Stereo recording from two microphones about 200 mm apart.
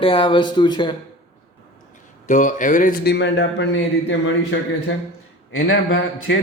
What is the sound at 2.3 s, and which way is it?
Speech, 40° left (ahead or behind).